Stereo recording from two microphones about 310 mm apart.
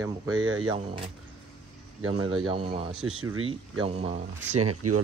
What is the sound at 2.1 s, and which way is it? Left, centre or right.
Speech, right.